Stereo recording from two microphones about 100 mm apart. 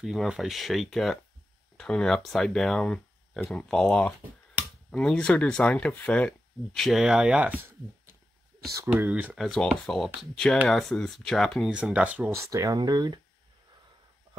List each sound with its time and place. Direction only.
0.0 s speech: 5° right (ahead or behind); by 6.3 s 10° left (ahead or behind)
6.7 s speech: centre (ahead or behind); by 7.7 s 15° right (ahead or behind)
8.9 s speech: 15° right (ahead or behind)
9.4 s speech: centre (ahead or behind)
11.7 s speech: 15° right (ahead or behind)
12.3 s speech: 35° right (ahead or behind)